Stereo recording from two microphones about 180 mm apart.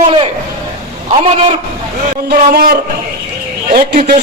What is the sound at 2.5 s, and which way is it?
A man's voice, 55° right (ahead or behind).